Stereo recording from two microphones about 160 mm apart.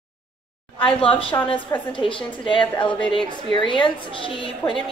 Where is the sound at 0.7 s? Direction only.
35° left (ahead or behind).